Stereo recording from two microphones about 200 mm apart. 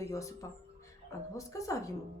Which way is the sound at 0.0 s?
15° left (ahead or behind).